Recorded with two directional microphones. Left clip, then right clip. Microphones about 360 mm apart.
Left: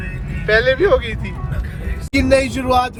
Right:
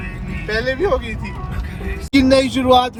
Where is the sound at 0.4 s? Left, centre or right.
Centre.